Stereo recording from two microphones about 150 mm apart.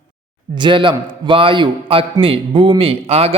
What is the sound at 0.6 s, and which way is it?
Speech, 30° right (ahead or behind).